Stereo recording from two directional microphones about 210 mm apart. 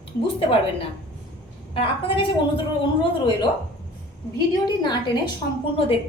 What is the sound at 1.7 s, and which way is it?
Speech, 25° left (ahead or behind).